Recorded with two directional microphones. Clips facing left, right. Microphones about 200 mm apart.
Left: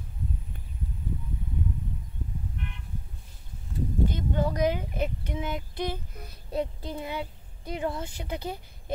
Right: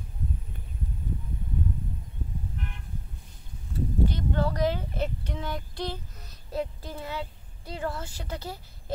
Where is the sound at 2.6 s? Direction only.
45° right (ahead or behind).